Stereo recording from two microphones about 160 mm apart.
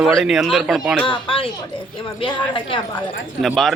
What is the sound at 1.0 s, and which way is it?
Speech, 35° left (ahead or behind).